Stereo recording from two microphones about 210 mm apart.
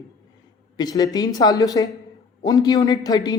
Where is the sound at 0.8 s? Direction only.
20° left (ahead or behind).